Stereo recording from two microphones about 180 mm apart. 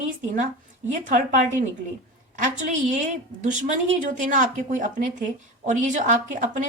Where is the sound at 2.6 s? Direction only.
45° right (ahead or behind).